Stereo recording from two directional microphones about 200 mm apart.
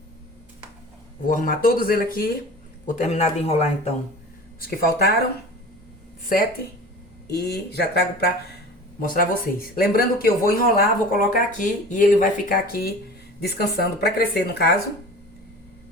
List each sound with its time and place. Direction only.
1.3 s speech: 45° left (ahead or behind)
4.6 s speech: 45° left (ahead or behind)
7.3 s speech: 55° left (ahead or behind)